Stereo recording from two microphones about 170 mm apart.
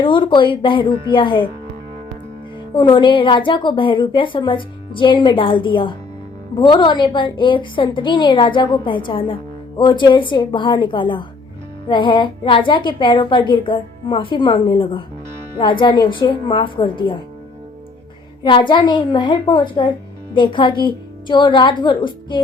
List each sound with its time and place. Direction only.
0.0 s a woman's voice: 30° left (ahead or behind)
2.7 s a woman's voice: 30° left (ahead or behind)
18.4 s a woman's voice: 30° left (ahead or behind)